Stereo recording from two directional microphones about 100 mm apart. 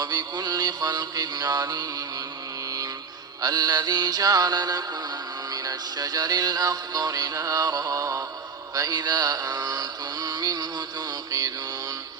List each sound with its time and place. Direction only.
0.0 s music: 40° right (ahead or behind)
8.7 s mantra: 40° right (ahead or behind)